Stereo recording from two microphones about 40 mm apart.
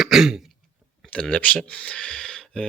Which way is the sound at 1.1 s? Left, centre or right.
Left.